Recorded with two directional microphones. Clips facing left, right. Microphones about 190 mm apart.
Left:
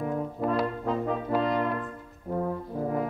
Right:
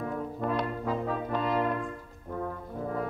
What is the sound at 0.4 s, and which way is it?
Brass instrument, 5° left (ahead or behind).